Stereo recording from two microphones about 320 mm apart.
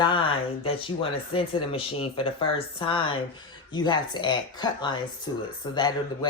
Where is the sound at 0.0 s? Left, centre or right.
Centre.